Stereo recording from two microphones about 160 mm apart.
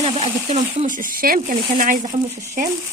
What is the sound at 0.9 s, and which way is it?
Speech, 60° right (ahead or behind).